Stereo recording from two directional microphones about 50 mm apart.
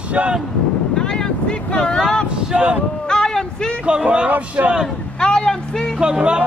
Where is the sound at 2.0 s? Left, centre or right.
Centre.